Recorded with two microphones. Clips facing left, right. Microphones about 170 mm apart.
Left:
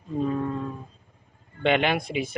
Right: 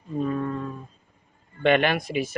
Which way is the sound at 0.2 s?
20° left (ahead or behind).